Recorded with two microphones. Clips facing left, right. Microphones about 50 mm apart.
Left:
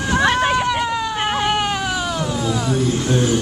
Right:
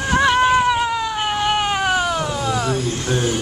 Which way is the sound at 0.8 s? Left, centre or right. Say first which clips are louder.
Even; centre.